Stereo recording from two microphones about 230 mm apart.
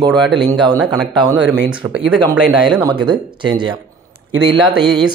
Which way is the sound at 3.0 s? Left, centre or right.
Centre.